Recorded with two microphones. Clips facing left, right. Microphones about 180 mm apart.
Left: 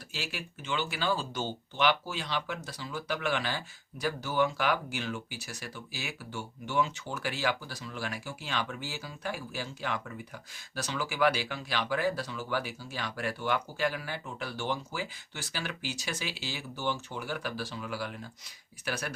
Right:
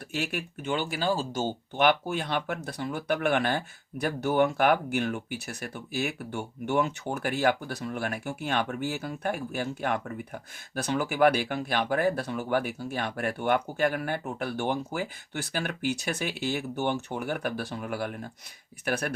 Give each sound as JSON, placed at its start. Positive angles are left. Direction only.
{"t": 0.1, "sound": "speech", "side_deg": -55}